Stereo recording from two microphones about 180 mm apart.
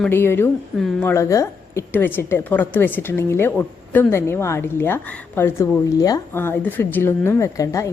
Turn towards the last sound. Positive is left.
turn(degrees=20)  # may be behind; listen again after turning